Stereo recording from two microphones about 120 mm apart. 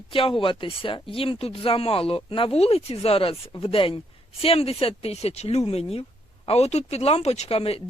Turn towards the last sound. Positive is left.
turn(degrees=55)  # may be behind; listen again after turning